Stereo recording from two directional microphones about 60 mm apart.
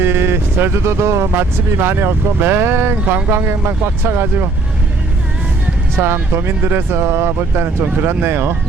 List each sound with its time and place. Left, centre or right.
0.0 s a sound: right
1.4 s speech: right
6.0 s speech: right
6.3 s speech: right